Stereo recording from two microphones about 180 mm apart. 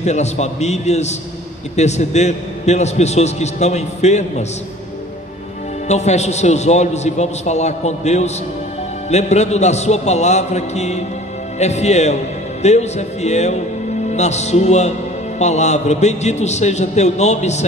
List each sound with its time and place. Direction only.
0.0 s a man's voice: 40° left (ahead or behind)
5.9 s a man's voice: 40° left (ahead or behind)